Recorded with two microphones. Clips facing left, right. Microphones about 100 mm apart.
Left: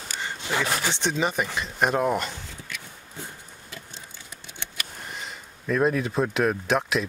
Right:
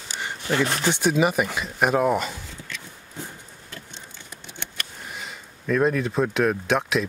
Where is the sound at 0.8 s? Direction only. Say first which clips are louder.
Right 5 dB; 15° right (ahead or behind).